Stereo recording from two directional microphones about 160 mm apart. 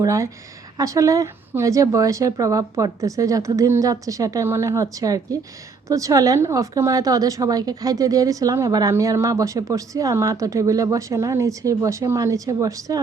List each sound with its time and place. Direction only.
0.0 s a woman's voice: 20° right (ahead or behind)